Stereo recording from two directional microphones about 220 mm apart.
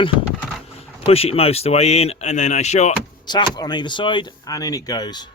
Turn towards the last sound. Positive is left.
turn(degrees=20)  # may be behind; listen again after turning